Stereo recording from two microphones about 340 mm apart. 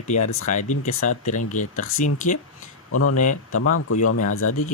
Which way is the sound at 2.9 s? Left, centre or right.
Left.